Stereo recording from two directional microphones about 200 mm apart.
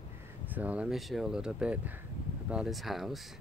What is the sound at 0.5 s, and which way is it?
Speech, 10° right (ahead or behind).